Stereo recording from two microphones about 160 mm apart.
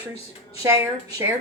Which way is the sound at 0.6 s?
15° right (ahead or behind).